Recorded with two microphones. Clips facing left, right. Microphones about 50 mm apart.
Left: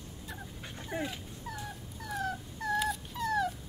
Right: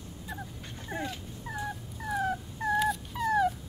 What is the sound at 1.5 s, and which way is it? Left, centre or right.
Dog, centre.